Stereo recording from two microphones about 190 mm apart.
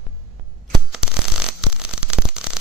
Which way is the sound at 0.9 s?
5° right (ahead or behind).